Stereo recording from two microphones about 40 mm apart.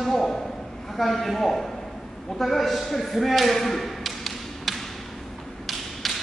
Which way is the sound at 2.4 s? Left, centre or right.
Centre.